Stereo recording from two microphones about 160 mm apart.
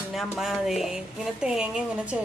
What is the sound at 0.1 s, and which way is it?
Speech, centre (ahead or behind).